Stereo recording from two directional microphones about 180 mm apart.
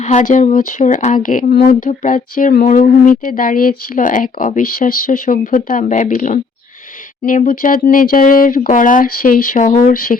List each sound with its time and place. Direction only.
0.0 s speech: 40° left (ahead or behind)